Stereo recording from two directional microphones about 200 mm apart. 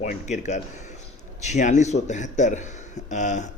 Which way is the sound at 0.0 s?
35° left (ahead or behind).